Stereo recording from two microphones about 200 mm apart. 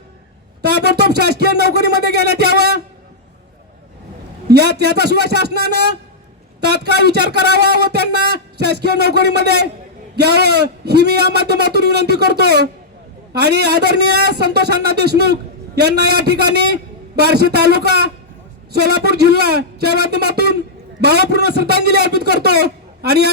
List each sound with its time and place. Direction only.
0.6 s a man's voice: 55° right (ahead or behind)
4.4 s a man's voice: 55° right (ahead or behind)